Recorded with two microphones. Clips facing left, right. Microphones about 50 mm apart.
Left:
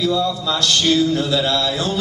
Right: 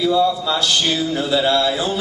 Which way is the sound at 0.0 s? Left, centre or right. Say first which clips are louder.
Right 3 dB; centre.